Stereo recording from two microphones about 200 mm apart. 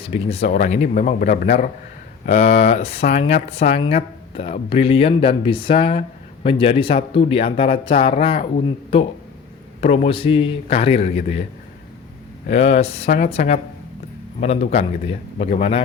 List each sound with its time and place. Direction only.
0.0 s a man's voice: 30° left (ahead or behind)
12.5 s a man's voice: 30° left (ahead or behind)